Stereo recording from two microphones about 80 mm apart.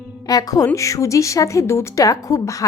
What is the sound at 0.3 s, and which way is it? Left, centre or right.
A woman's voice, left.